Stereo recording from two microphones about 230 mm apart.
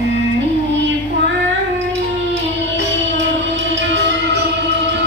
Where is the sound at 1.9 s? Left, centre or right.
Right.